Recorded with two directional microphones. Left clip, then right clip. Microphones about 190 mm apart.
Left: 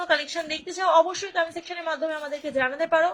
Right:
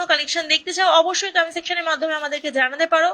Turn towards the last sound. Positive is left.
turn(degrees=5)  # may be behind; listen again after turning